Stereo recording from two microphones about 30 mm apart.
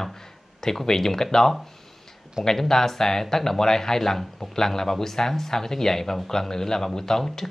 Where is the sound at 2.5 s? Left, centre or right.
Centre.